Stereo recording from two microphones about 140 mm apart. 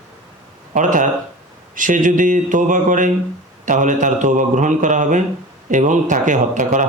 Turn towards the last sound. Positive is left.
turn(degrees=-65)  # may be behind; listen again after turning